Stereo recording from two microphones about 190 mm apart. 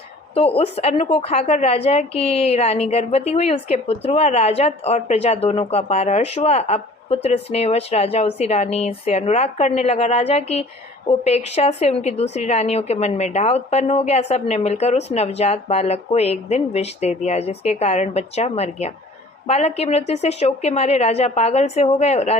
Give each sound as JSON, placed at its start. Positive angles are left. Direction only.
{"t": 0.3, "sound": "a woman's voice", "side_deg": 30}